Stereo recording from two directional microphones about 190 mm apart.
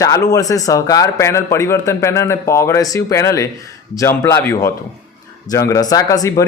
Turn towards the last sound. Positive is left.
turn(degrees=20)  # may be behind; listen again after turning